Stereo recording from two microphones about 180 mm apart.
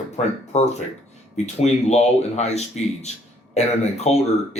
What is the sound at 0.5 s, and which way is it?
Speech, 40° left (ahead or behind).